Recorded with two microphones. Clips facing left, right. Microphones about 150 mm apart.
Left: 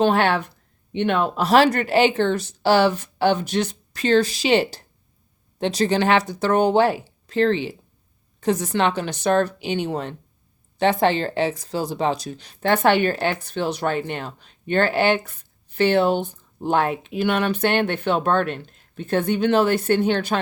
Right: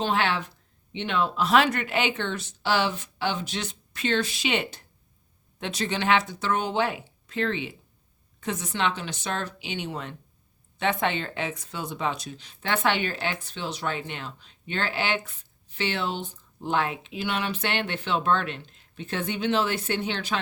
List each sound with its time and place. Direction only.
0.0 s speech: 50° left (ahead or behind)
3.2 s speech: 50° left (ahead or behind)
9.0 s speech: 60° left (ahead or behind)